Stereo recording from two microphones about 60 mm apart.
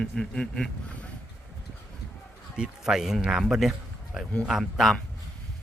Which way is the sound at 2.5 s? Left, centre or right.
Centre.